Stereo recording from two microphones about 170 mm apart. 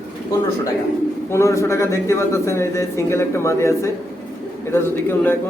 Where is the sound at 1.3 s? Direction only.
15° left (ahead or behind).